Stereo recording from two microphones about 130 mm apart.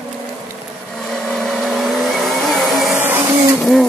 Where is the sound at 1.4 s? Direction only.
Centre (ahead or behind).